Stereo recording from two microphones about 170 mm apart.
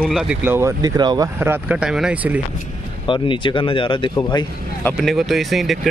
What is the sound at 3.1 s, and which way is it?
Speech, 30° left (ahead or behind).